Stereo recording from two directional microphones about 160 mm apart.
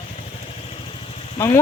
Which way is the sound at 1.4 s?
15° left (ahead or behind).